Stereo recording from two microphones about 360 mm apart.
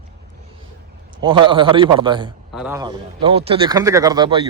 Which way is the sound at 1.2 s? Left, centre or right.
Centre.